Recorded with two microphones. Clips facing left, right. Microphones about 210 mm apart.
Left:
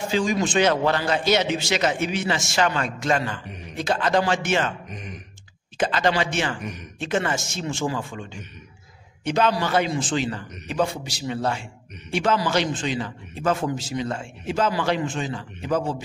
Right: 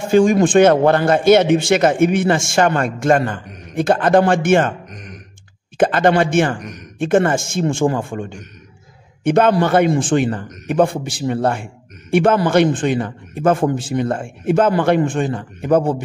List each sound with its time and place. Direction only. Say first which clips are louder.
0.1 s a man's voice: right 11 dB; 50° right (ahead or behind)
4.8 s speech: right 1 dB; centre (ahead or behind)
5.8 s a man's voice: right 8 dB; 55° right (ahead or behind)